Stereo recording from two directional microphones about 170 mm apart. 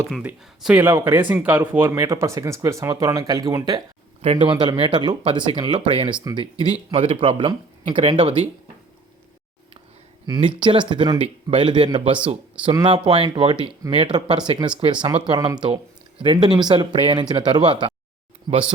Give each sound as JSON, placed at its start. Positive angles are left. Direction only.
{"t": 0.1, "sound": "speech", "side_deg": -5}
{"t": 4.2, "sound": "speech", "side_deg": -40}
{"t": 4.6, "sound": "speech", "side_deg": -25}
{"t": 10.2, "sound": "speech", "side_deg": -25}